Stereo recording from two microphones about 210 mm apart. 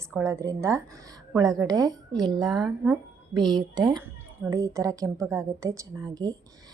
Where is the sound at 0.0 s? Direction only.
15° right (ahead or behind).